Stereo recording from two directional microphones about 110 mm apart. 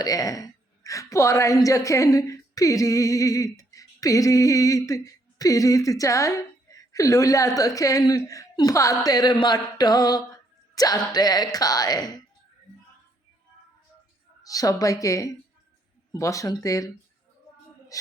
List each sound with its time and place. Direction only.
0.0 s a woman's voice: 35° left (ahead or behind)
14.4 s a woman's voice: 35° left (ahead or behind)